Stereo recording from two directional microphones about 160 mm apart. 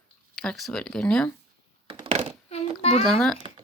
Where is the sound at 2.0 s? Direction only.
40° right (ahead or behind).